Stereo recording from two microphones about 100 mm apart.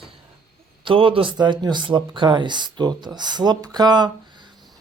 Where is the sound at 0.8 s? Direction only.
65° right (ahead or behind).